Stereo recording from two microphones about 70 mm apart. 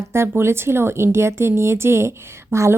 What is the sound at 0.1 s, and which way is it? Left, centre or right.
A woman's voice, right.